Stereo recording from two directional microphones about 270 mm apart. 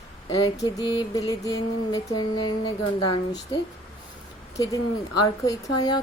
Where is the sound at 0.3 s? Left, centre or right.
Centre.